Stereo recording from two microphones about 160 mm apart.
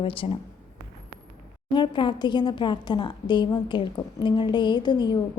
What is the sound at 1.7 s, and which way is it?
A woman's voice, 30° left (ahead or behind).